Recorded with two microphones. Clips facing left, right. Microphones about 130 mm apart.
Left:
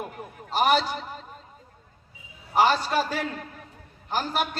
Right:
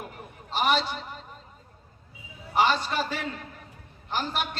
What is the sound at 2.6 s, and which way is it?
A man's voice, 40° left (ahead or behind).